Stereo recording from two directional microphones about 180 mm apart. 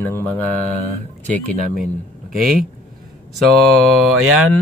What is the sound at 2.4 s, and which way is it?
Speech, 50° right (ahead or behind).